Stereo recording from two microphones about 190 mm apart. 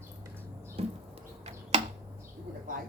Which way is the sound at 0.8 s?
30° right (ahead or behind).